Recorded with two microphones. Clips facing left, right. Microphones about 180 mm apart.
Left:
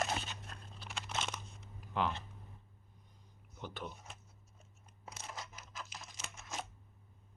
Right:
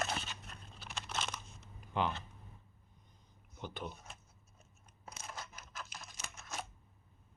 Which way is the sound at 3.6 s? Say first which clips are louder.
Right 1 dB; centre (ahead or behind).